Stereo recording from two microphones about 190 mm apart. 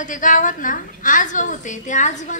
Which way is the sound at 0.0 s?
45° left (ahead or behind).